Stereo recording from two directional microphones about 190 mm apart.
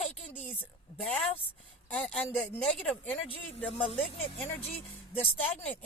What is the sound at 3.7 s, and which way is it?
Speech, 30° left (ahead or behind).